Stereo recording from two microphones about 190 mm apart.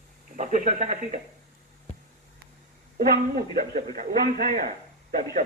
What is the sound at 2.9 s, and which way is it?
Speech, 50° right (ahead or behind).